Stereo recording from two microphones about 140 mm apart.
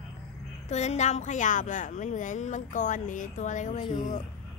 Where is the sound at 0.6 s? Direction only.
55° left (ahead or behind).